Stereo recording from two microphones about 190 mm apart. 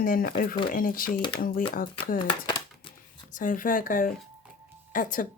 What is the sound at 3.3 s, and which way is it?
Speech, 45° left (ahead or behind).